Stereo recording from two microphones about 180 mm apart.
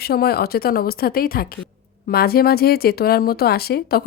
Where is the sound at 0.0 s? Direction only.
60° left (ahead or behind).